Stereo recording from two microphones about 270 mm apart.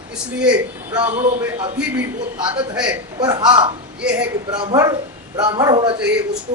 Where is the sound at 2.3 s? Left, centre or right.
Centre.